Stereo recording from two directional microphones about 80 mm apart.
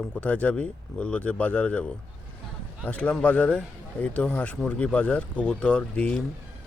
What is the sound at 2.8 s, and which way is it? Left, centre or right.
Speech, centre.